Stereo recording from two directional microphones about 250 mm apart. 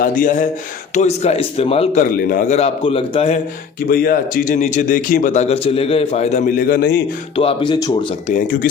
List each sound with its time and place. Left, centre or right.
0.0 s a man's voice: left
3.8 s a man's voice: left
7.3 s a man's voice: left
8.3 s a man's voice: left